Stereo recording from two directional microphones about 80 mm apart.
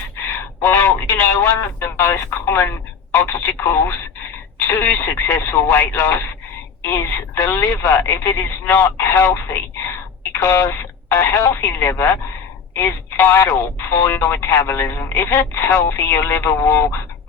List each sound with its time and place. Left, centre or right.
0.6 s speech: left